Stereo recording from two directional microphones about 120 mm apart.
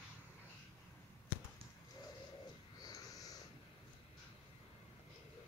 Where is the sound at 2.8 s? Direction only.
30° left (ahead or behind).